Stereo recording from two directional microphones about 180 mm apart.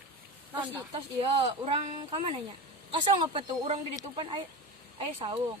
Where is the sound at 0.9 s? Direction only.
30° right (ahead or behind).